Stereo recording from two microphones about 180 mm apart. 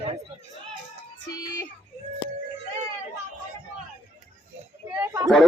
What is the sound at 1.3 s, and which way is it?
Child singing, 20° left (ahead or behind).